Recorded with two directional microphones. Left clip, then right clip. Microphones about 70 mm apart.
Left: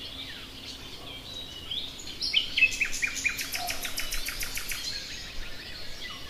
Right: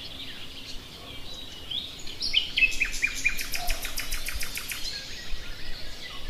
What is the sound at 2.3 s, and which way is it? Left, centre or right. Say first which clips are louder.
Bird: even; centre.